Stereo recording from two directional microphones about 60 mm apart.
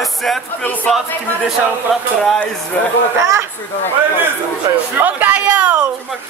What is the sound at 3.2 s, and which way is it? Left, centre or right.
Speech, right.